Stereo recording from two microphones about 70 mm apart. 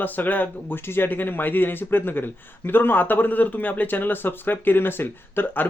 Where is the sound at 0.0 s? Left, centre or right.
Left.